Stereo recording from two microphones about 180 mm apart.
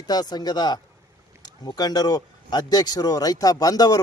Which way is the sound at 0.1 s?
20° left (ahead or behind).